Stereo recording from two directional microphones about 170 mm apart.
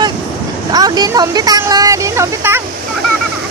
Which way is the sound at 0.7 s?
20° right (ahead or behind).